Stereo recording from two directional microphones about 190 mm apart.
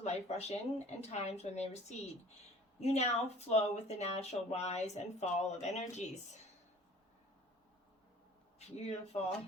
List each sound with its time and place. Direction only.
0.0 s speech: 35° left (ahead or behind)
8.5 s a man's voice: 35° left (ahead or behind)